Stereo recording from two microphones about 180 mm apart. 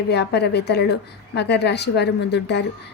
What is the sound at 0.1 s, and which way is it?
A woman's voice, 65° left (ahead or behind).